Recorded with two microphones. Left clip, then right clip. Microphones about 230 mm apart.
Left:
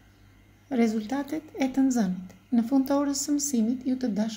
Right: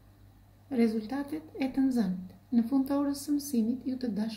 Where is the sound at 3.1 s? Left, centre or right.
Left.